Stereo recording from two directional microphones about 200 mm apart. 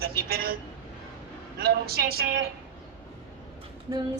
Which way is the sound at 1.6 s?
50° right (ahead or behind).